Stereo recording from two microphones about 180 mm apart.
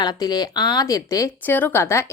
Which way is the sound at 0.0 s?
20° left (ahead or behind).